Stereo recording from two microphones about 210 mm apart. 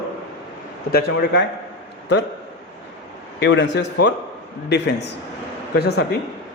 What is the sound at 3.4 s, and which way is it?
Speech, 55° left (ahead or behind).